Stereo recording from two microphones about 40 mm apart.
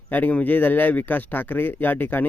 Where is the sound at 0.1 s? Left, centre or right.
Left.